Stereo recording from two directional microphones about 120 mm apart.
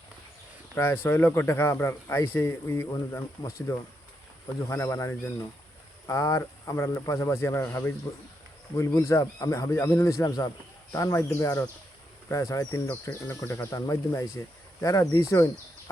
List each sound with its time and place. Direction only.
0.8 s speech: 15° left (ahead or behind)
13.1 s speech: 15° left (ahead or behind)